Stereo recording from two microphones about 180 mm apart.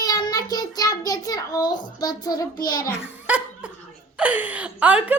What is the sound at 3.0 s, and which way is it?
Laughter, 5° right (ahead or behind).